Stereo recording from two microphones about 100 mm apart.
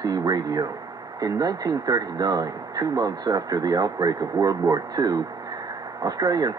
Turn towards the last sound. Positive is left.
turn(degrees=-40)  # may be behind; listen again after turning